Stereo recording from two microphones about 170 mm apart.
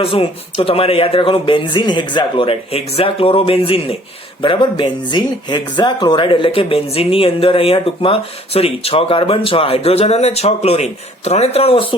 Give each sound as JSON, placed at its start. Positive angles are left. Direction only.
{"t": 0.0, "sound": "speech", "side_deg": 35}